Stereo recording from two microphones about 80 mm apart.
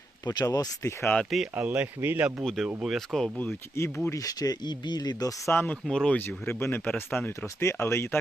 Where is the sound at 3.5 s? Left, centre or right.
Left.